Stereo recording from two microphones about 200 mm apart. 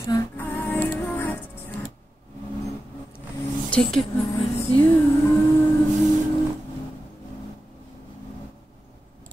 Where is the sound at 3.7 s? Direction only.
Centre (ahead or behind).